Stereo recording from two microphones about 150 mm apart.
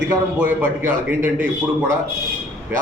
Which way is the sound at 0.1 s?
15° right (ahead or behind).